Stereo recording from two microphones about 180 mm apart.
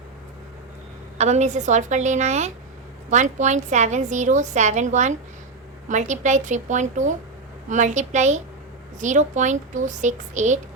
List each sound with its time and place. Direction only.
1.2 s a woman's voice: 40° right (ahead or behind)